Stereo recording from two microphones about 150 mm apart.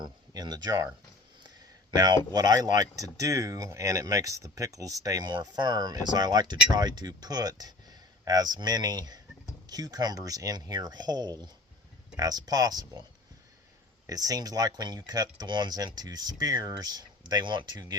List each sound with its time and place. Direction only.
0.0 s speech: 25° right (ahead or behind)
2.0 s speech: 25° right (ahead or behind)
14.1 s speech: 25° right (ahead or behind)